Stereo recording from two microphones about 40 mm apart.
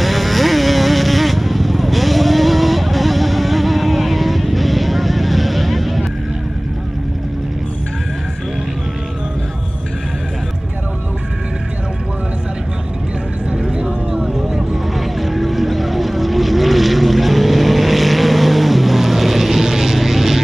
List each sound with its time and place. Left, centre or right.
0.0 s vehicle: centre
13.5 s vehicle: right
15.2 s vehicle: centre